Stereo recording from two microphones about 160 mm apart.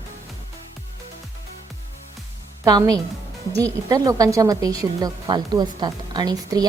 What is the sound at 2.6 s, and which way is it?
A woman's voice, 25° right (ahead or behind).